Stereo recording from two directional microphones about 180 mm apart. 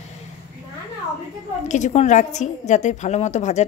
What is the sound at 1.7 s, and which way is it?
A child's voice, 40° left (ahead or behind).